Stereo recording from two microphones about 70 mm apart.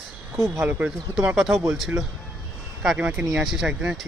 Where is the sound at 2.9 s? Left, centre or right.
Centre.